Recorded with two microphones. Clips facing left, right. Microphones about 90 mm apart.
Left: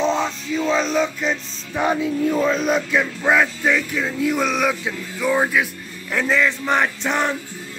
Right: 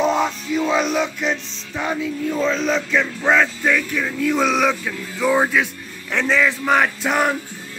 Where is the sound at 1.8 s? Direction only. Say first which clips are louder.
Left 4 dB; 10° left (ahead or behind).